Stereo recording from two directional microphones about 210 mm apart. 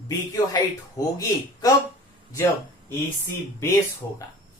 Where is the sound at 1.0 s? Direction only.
15° left (ahead or behind).